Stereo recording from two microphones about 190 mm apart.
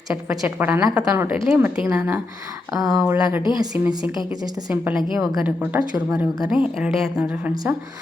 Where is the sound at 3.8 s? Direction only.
10° right (ahead or behind).